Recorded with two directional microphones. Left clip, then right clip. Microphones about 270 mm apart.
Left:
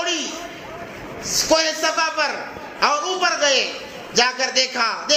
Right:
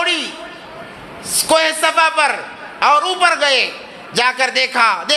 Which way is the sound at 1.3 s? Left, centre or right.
Right.